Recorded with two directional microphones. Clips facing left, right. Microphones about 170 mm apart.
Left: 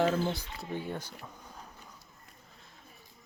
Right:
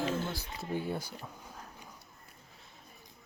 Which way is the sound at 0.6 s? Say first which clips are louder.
Right 3 dB; 10° right (ahead or behind).